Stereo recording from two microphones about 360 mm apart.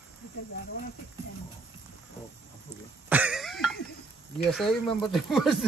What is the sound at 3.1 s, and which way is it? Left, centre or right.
Cough, centre.